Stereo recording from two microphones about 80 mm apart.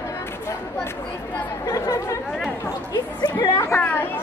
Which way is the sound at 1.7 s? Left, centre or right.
Left.